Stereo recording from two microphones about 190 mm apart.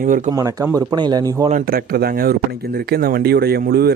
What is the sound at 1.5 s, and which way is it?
Speech, 45° right (ahead or behind).